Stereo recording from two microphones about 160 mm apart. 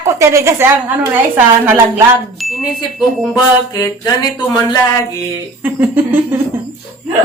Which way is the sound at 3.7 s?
25° left (ahead or behind).